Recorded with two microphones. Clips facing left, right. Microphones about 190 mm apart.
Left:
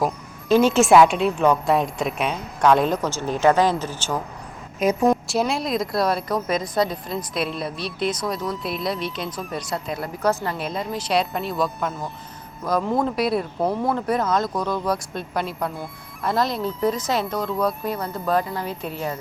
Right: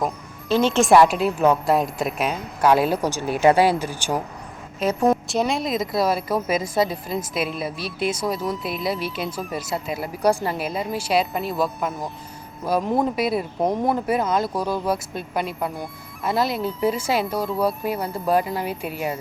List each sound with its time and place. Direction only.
0.4 s a woman's voice: 10° left (ahead or behind); by 4.2 s 15° right (ahead or behind)
4.8 s a woman's voice: 10° left (ahead or behind)
5.0 s a woman's voice: centre (ahead or behind)
12.7 s speech: 15° right (ahead or behind)
13.1 s a woman's voice: centre (ahead or behind)
13.6 s a woman's voice: 15° right (ahead or behind)